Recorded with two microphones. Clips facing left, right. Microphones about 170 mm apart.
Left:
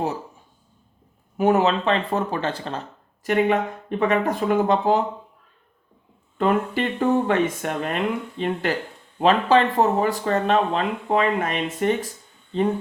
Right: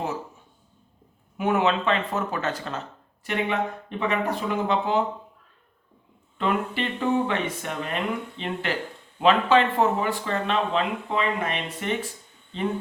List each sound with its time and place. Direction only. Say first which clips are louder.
1.4 s speech: left 4 dB; 40° left (ahead or behind)
3.2 s speech: left 6 dB; 45° left (ahead or behind)
6.3 s speech: left 5 dB; 45° left (ahead or behind)